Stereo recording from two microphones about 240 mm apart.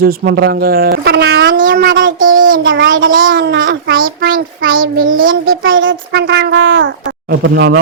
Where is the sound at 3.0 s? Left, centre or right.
Right.